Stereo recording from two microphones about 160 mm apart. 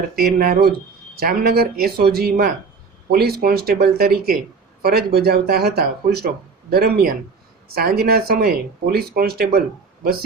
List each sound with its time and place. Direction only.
0.2 s speech: 65° right (ahead or behind)